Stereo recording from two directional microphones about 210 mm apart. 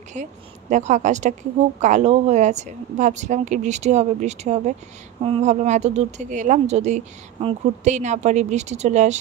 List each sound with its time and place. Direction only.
0.1 s speech: 35° right (ahead or behind)